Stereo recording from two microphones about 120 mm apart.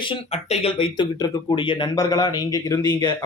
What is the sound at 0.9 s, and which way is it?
Speech, 35° left (ahead or behind).